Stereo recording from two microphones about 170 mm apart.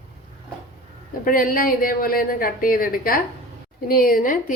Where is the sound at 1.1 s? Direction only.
55° left (ahead or behind).